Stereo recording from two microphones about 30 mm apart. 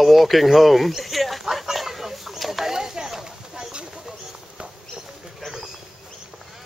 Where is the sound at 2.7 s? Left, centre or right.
Centre.